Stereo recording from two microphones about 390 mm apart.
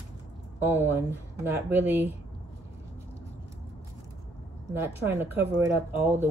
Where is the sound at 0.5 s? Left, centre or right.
Centre.